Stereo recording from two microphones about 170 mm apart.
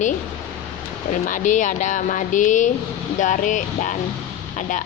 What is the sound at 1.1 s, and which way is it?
A woman's voice, 50° left (ahead or behind).